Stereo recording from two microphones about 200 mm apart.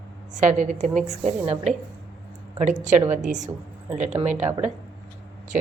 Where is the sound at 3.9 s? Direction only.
35° right (ahead or behind).